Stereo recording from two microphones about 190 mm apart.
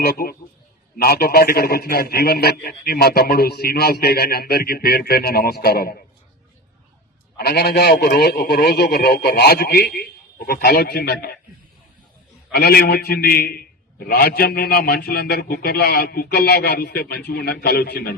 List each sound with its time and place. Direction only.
0.0 s a man's voice: 55° left (ahead or behind)
7.3 s a man's voice: 55° left (ahead or behind)
12.5 s a man's voice: 55° left (ahead or behind)